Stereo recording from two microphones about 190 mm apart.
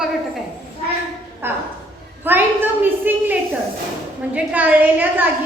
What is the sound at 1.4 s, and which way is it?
A child's voice, 10° right (ahead or behind).